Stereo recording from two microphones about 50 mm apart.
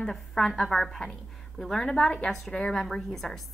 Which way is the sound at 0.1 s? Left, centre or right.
Centre.